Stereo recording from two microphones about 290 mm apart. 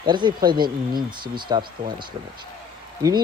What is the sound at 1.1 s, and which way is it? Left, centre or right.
Speech, centre.